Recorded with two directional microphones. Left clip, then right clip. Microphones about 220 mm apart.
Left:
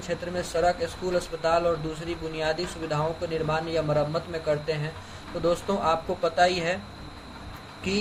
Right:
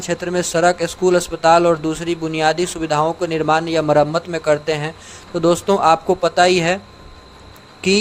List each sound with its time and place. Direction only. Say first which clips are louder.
0.1 s speech: right 10 dB; 50° right (ahead or behind)